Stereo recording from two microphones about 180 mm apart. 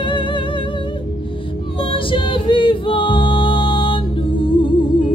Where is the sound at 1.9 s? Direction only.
30° left (ahead or behind).